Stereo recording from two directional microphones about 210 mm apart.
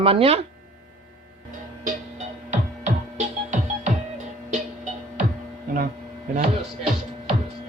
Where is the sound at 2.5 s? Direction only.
35° right (ahead or behind).